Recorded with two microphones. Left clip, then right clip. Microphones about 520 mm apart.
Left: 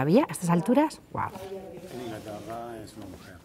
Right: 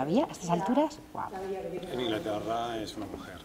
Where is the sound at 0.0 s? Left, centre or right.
Left.